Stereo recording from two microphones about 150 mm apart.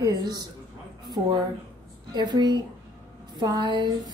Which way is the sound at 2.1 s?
30° right (ahead or behind).